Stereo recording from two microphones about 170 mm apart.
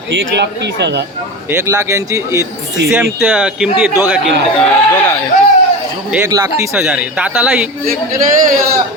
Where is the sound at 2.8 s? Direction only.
90° right.